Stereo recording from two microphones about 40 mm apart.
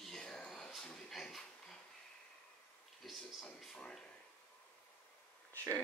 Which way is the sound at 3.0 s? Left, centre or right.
Centre.